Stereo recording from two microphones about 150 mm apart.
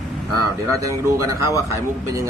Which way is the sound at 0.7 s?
20° right (ahead or behind).